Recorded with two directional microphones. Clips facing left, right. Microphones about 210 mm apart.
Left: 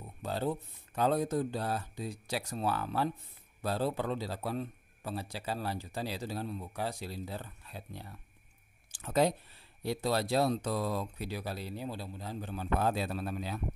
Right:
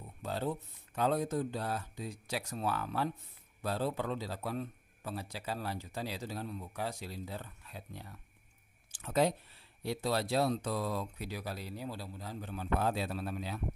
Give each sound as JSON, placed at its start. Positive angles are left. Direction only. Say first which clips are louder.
{"t": 0.2, "sound": "a man's voice", "louder": "left 2 dB", "side_deg": 35}
{"t": 12.8, "sound": "a man's voice", "louder": "left 2 dB", "side_deg": 45}